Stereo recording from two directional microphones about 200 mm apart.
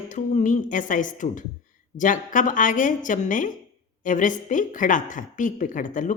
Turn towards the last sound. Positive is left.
turn(degrees=40)  # may be behind; listen again after turning